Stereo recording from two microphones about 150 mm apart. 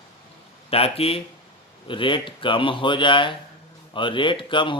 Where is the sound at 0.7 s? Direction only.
40° left (ahead or behind).